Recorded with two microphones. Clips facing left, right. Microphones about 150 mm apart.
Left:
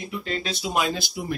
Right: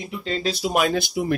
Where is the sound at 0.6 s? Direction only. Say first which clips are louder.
Right 5 dB; 55° right (ahead or behind).